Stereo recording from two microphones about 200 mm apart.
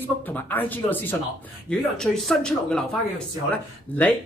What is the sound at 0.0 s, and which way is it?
Speech, 10° left (ahead or behind).